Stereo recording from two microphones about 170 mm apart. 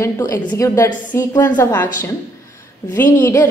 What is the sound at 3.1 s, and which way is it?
Speech, 10° left (ahead or behind).